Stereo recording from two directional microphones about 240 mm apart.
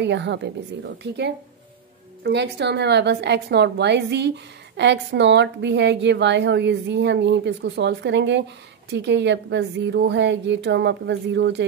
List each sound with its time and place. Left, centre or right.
0.0 s a woman's voice: right